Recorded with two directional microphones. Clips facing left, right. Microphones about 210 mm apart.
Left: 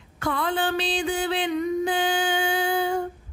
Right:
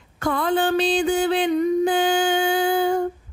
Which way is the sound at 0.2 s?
45° right (ahead or behind).